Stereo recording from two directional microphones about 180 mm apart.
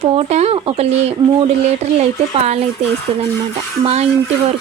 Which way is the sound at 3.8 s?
35° right (ahead or behind).